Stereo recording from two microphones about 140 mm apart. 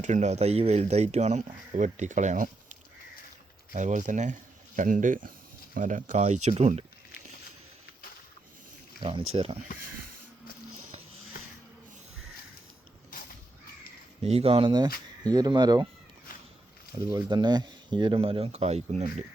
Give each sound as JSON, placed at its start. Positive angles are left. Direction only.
{"t": 0.0, "sound": "speech", "side_deg": -60}
{"t": 3.7, "sound": "speech", "side_deg": -65}
{"t": 9.0, "sound": "speech", "side_deg": -45}
{"t": 13.1, "sound": "crow", "side_deg": 80}
{"t": 14.3, "sound": "speech", "side_deg": -45}
{"t": 17.0, "sound": "speech", "side_deg": -30}